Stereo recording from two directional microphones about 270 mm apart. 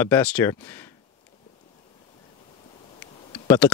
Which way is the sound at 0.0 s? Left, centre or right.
Centre.